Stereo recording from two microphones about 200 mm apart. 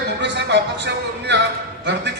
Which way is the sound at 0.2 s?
60° right (ahead or behind).